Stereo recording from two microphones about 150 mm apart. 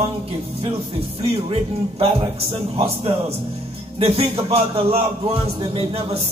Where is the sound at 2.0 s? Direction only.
40° right (ahead or behind).